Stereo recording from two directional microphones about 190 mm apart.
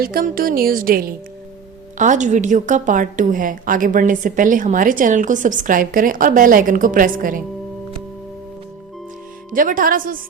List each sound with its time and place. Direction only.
0.0 s a woman's voice: 50° right (ahead or behind)
9.5 s a woman's voice: 45° right (ahead or behind)